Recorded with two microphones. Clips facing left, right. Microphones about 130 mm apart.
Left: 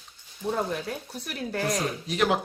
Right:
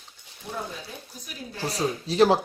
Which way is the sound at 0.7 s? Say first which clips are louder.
Left 8 dB; 70° left (ahead or behind).